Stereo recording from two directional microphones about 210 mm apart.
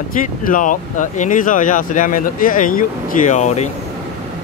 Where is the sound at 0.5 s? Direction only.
40° left (ahead or behind).